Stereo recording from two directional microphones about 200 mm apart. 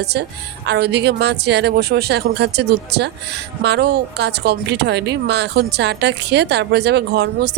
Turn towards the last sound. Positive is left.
turn(degrees=-55)  # may be behind; listen again after turning